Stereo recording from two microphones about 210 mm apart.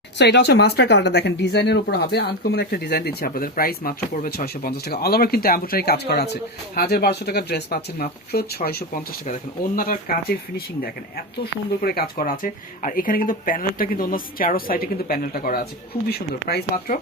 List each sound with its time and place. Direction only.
0.2 s speech: 55° left (ahead or behind)
11.8 s speech: 45° left (ahead or behind)